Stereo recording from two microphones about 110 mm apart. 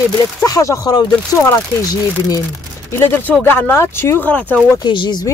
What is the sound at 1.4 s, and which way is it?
Speech, 25° left (ahead or behind).